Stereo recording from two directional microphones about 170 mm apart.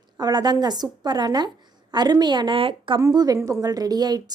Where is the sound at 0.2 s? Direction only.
25° right (ahead or behind).